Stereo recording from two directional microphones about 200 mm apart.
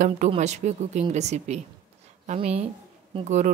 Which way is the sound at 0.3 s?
35° right (ahead or behind).